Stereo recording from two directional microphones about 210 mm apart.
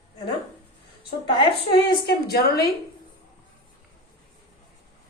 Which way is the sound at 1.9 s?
50° left (ahead or behind).